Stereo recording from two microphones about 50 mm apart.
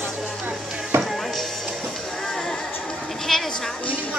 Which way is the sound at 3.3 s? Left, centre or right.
Centre.